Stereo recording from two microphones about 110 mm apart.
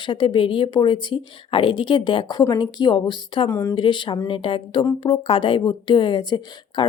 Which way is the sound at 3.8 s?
45° left (ahead or behind).